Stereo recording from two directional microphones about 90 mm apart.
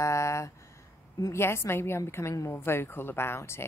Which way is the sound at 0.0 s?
35° left (ahead or behind).